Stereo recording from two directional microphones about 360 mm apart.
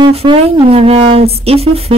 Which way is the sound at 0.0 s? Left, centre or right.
Centre.